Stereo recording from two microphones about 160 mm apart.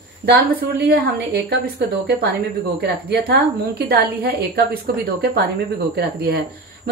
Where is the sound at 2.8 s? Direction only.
80° right.